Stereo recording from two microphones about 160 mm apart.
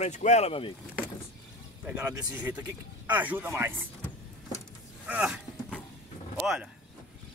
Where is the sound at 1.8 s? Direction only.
5° right (ahead or behind).